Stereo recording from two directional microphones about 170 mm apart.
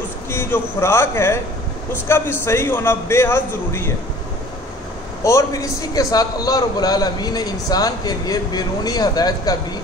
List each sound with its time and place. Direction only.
0.3 s a man's voice: 15° left (ahead or behind)
5.2 s a man's voice: 20° left (ahead or behind)